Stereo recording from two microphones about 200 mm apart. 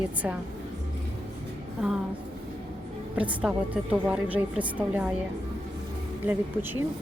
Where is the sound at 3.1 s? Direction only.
5° right (ahead or behind).